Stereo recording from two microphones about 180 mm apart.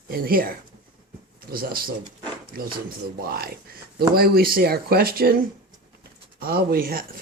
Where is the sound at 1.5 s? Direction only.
55° right (ahead or behind).